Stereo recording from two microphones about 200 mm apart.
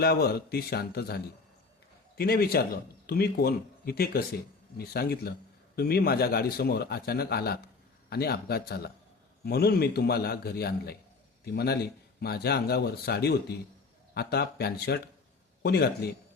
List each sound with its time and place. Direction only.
0.0 s speech: 50° left (ahead or behind)